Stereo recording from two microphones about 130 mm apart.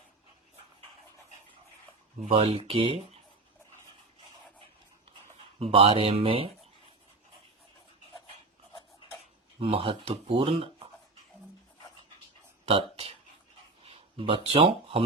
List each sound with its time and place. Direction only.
2.3 s speech: 50° right (ahead or behind)
5.5 s speech: 45° right (ahead or behind)
9.6 s speech: 45° right (ahead or behind)
12.6 s speech: 45° right (ahead or behind)